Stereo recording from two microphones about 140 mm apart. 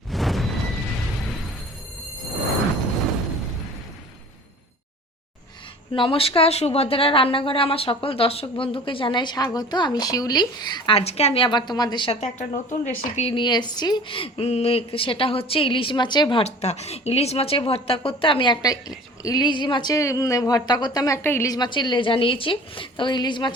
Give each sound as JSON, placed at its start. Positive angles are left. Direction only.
{"t": 0.1, "sound": "a sound", "side_deg": 0}
{"t": 5.9, "sound": "speech", "side_deg": 40}
{"t": 12.2, "sound": "speech", "side_deg": 55}
{"t": 13.3, "sound": "speech", "side_deg": 30}
{"t": 16.4, "sound": "speech", "side_deg": 50}